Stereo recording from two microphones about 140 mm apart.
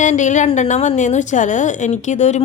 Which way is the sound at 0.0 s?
60° left (ahead or behind).